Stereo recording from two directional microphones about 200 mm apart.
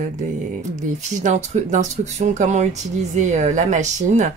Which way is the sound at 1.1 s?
35° right (ahead or behind).